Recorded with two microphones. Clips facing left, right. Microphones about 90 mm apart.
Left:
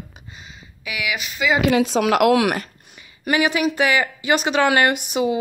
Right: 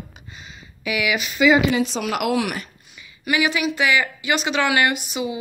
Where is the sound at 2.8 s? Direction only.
45° left (ahead or behind).